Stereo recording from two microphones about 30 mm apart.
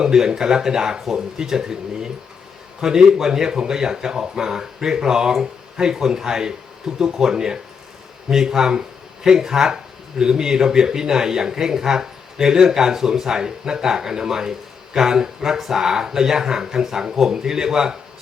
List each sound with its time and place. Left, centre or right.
0.0 s speech: right